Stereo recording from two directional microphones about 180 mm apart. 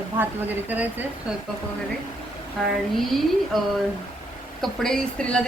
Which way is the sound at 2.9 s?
Centre (ahead or behind).